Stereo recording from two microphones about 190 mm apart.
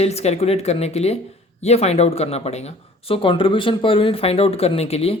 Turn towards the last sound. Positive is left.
turn(degrees=30)  # may be behind; listen again after turning